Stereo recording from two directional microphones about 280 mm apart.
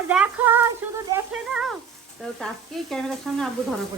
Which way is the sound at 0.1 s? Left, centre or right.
Centre.